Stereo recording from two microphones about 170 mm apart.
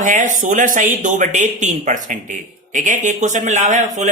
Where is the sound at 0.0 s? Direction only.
50° right (ahead or behind).